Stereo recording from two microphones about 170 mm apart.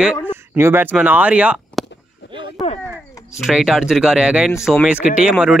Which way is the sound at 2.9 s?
Centre (ahead or behind).